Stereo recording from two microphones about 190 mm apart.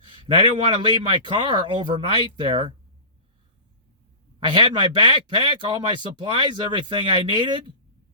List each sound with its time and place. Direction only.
0.3 s speech: 25° right (ahead or behind)
4.4 s speech: 25° right (ahead or behind)